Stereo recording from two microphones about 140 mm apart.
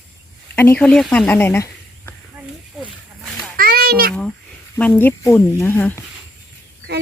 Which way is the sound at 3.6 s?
90° right.